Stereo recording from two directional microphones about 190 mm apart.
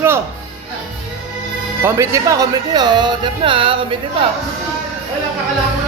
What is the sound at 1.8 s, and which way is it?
Speech, 15° right (ahead or behind).